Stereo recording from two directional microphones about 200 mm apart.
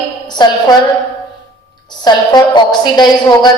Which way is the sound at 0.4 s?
20° left (ahead or behind).